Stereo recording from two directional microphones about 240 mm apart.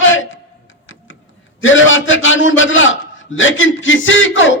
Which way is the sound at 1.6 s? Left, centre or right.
Left.